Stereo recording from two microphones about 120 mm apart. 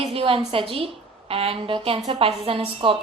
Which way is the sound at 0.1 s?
50° right (ahead or behind).